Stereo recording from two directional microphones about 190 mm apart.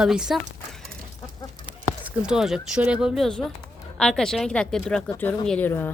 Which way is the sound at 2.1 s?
5° right (ahead or behind).